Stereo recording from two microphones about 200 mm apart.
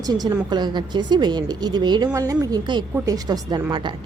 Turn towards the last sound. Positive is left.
turn(degrees=-25)  # may be behind; listen again after turning